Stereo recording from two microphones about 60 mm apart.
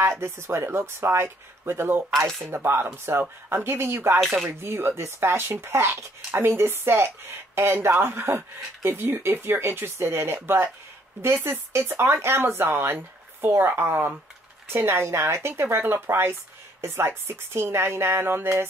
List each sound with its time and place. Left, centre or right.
0.0 s speech: right